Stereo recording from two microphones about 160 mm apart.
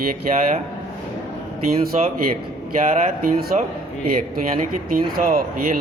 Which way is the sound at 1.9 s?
50° right (ahead or behind).